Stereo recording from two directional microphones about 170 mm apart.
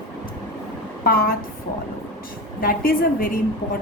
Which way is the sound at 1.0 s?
60° left (ahead or behind).